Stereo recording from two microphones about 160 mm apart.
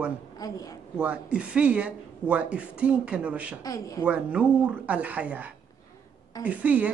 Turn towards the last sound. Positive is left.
turn(degrees=-10)  # may be behind; listen again after turning